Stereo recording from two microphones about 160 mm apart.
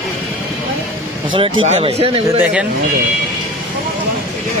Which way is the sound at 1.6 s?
40° right (ahead or behind).